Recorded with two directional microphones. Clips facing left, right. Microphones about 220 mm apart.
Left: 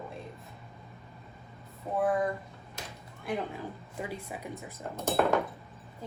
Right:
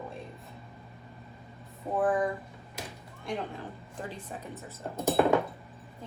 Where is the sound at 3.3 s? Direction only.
5° left (ahead or behind).